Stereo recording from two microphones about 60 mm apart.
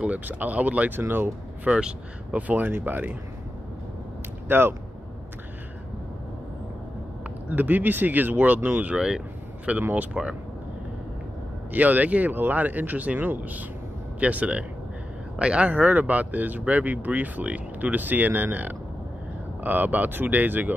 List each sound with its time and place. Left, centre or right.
0.0 s speech: right
1.7 s speech: centre; by 3.2 s right
4.5 s speech: right
7.4 s speech: right
8.9 s speech: centre
9.7 s speech: right
10.2 s speech: centre
11.7 s speech: right